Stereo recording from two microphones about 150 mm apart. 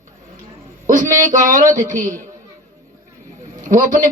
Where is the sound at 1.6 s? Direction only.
20° right (ahead or behind).